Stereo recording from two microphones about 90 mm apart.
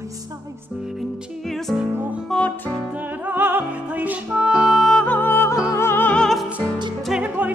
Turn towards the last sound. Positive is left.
turn(degrees=-15)  # may be behind; listen again after turning